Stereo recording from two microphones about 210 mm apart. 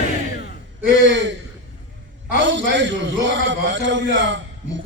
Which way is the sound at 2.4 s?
60° right (ahead or behind).